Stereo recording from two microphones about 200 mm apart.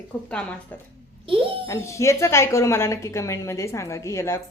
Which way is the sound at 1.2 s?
25° right (ahead or behind).